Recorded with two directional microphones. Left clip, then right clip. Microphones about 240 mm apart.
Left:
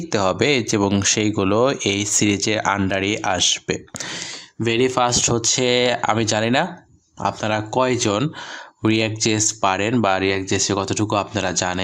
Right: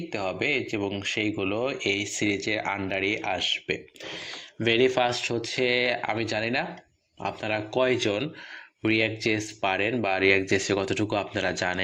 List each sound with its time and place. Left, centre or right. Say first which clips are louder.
0.1 s speech: left 9 dB; left
10.2 s speech: left 2 dB; centre